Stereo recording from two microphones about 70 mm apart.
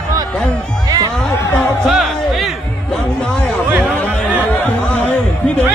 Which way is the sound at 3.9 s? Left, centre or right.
Left.